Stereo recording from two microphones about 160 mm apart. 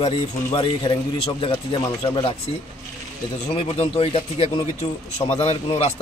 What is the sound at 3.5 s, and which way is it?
A man's voice, 35° left (ahead or behind).